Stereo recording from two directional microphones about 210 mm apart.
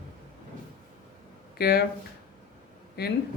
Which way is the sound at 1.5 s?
50° left (ahead or behind).